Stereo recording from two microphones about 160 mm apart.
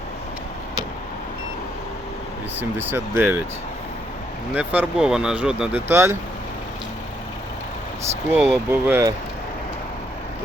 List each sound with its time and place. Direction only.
2.6 s speech: 10° right (ahead or behind)
4.5 s speech: 10° right (ahead or behind)
5.9 s speech: 15° right (ahead or behind)
8.3 s speech: 15° right (ahead or behind)